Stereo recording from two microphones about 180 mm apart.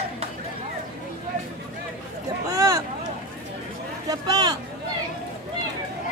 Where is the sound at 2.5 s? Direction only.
20° right (ahead or behind).